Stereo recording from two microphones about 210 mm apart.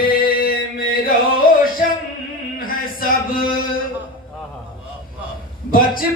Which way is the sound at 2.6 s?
45° left (ahead or behind).